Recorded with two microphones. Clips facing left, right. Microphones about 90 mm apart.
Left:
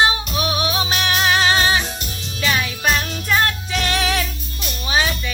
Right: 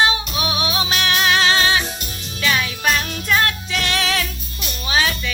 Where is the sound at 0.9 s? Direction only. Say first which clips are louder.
Right 2 dB; 20° left (ahead or behind).